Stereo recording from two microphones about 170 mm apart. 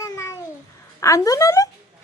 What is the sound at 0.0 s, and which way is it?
Babbling, 15° left (ahead or behind).